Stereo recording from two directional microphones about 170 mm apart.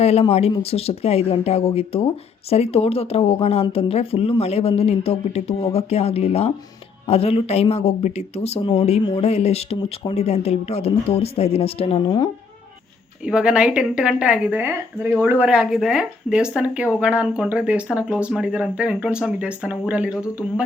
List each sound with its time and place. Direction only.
0.0 s speech: 35° left (ahead or behind)
13.2 s a woman's voice: 5° right (ahead or behind)